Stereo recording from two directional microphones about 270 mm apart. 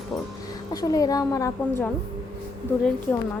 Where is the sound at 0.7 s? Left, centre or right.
Centre.